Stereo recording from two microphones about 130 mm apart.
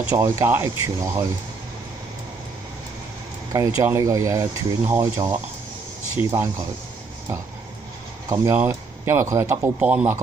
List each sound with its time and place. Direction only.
0.1 s speech: 20° right (ahead or behind)
3.5 s speech: 25° right (ahead or behind)
8.3 s speech: 20° right (ahead or behind)